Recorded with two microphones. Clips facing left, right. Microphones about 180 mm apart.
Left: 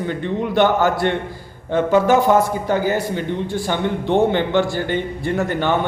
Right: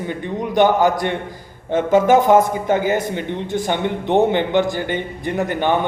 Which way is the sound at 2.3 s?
20° right (ahead or behind).